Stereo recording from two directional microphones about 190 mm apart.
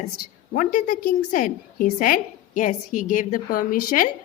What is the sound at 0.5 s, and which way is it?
A woman's voice, 45° left (ahead or behind).